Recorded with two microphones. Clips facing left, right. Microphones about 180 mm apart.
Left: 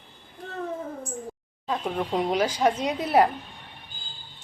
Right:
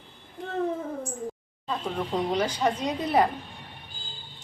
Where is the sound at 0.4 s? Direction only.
20° right (ahead or behind).